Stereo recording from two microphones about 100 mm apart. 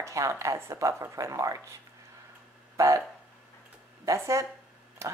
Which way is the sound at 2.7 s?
30° right (ahead or behind).